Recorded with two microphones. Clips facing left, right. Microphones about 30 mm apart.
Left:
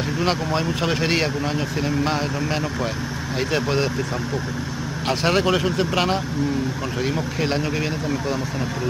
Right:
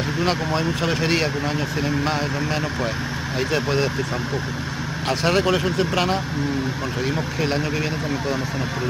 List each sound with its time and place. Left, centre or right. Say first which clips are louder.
0.2 s speech: even; centre
5.0 s speech: even; centre